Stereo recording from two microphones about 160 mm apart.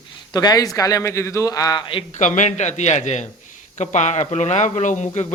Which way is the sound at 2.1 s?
50° left (ahead or behind).